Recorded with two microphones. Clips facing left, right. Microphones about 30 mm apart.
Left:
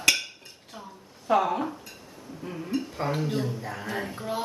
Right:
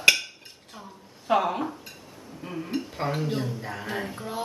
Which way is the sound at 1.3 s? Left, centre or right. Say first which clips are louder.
Left 2 dB; centre.